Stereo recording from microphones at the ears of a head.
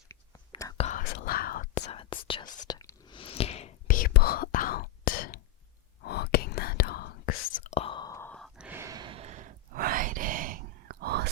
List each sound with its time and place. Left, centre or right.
0.5 s whispering: left
8.8 s sigh: right